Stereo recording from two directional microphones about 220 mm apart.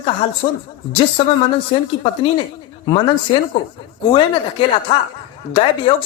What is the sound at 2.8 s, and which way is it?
Speech, 25° left (ahead or behind).